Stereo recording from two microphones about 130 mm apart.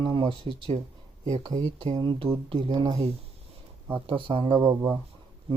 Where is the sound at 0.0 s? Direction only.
40° right (ahead or behind).